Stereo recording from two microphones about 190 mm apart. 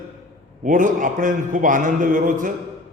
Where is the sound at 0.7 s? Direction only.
45° right (ahead or behind).